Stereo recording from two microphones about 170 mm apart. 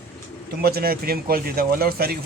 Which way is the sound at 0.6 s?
60° right (ahead or behind).